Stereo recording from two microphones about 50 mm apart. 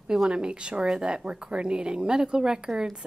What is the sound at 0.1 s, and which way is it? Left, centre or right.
Speech, centre.